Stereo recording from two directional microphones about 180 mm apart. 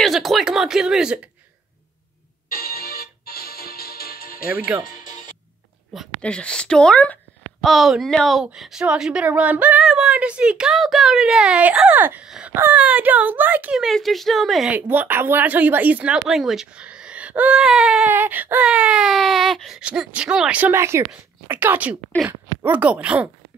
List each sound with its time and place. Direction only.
0.0 s a woman's voice: centre (ahead or behind)
2.5 s music: 55° left (ahead or behind)
4.7 s speech: 10° right (ahead or behind)
5.9 s a woman's voice: 5° left (ahead or behind)